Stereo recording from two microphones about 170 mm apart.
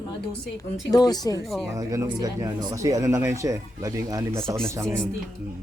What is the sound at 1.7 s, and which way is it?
Speech, 20° right (ahead or behind).